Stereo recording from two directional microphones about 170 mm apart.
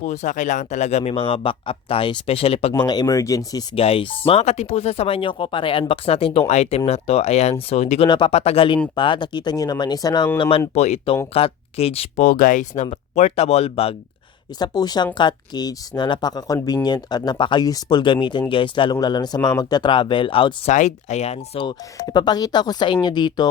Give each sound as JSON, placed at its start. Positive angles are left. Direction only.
{"t": 0.0, "sound": "speech", "side_deg": 45}
{"t": 2.7, "sound": "speech", "side_deg": 25}
{"t": 3.8, "sound": "speech", "side_deg": 35}
{"t": 14.6, "sound": "speech", "side_deg": 25}
{"t": 20.7, "sound": "speech", "side_deg": 45}